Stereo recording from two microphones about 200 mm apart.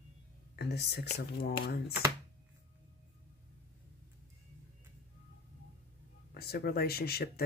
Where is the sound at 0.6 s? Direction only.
55° left (ahead or behind).